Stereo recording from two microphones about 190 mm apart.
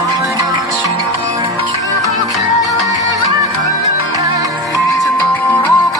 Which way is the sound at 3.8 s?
20° right (ahead or behind).